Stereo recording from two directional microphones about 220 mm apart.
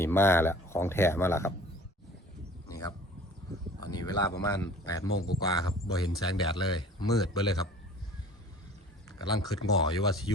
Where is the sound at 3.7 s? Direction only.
20° left (ahead or behind).